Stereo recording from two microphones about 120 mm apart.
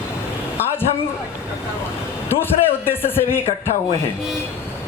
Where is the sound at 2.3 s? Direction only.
20° left (ahead or behind).